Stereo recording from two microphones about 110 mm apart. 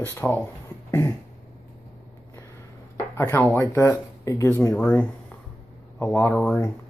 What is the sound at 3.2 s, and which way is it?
Speech, 25° left (ahead or behind).